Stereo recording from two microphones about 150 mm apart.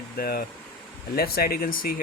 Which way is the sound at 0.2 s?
80° left.